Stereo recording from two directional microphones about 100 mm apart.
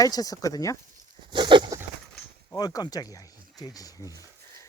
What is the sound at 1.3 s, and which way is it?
Goat, 55° right (ahead or behind).